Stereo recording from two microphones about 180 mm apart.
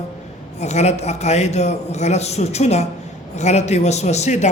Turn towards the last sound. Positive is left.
turn(degrees=40)  # may be behind; listen again after turning